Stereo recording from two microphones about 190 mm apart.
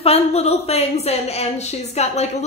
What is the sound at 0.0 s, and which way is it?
A woman's voice, 35° left (ahead or behind).